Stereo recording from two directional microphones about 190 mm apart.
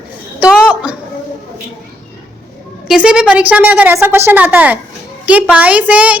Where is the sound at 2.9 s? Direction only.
5° right (ahead or behind).